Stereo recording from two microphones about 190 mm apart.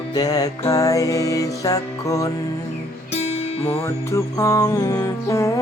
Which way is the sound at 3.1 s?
35° left (ahead or behind).